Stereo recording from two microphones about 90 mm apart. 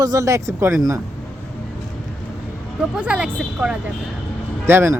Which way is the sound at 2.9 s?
10° right (ahead or behind).